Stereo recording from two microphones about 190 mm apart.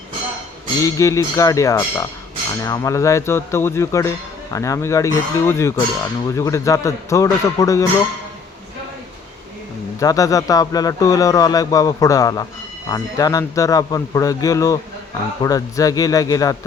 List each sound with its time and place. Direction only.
0.8 s speech: 15° left (ahead or behind)
10.0 s a man's voice: 15° left (ahead or behind)